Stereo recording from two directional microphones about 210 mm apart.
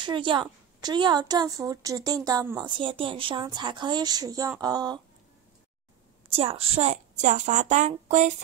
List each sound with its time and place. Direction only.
0.0 s a woman's voice: 20° right (ahead or behind)
6.2 s a woman's voice: 25° right (ahead or behind)